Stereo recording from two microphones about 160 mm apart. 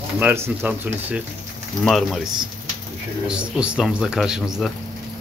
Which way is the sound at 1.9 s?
Centre (ahead or behind).